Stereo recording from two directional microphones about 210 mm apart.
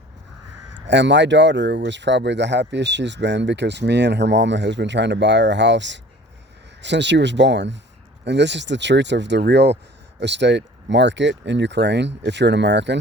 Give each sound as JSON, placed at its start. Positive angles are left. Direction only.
{"t": 0.7, "sound": "speech", "side_deg": -55}